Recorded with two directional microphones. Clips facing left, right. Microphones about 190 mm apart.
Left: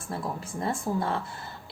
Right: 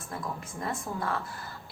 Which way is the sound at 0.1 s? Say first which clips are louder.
Left 4 dB; 30° left (ahead or behind).